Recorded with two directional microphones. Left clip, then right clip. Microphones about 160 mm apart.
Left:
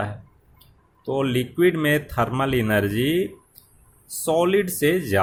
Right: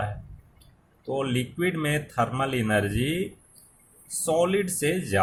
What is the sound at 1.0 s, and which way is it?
Speech, 45° left (ahead or behind).